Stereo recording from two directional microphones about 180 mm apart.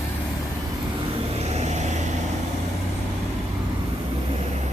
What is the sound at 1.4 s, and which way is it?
Vehicle, 35° right (ahead or behind).